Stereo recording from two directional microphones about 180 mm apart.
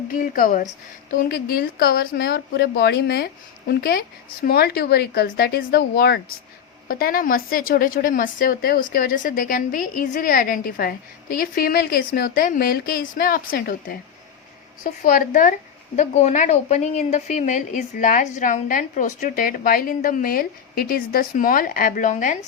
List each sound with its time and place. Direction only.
0.1 s a woman's voice: 50° left (ahead or behind)